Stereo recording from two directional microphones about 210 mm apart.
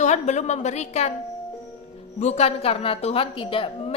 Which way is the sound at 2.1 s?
30° left (ahead or behind).